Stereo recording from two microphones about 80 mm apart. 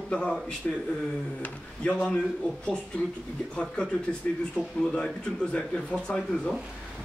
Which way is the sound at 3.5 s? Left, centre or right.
Centre.